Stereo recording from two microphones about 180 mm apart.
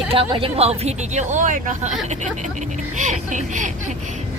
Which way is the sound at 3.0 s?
45° right (ahead or behind).